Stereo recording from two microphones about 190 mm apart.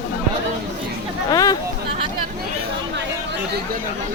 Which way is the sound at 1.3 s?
20° left (ahead or behind).